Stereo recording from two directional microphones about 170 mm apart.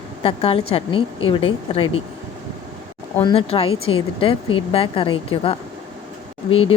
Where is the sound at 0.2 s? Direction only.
35° left (ahead or behind).